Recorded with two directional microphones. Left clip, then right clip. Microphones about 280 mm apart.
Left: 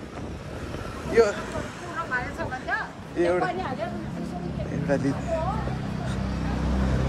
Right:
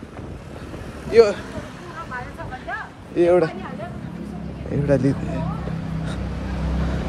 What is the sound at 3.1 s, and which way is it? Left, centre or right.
Speech, centre.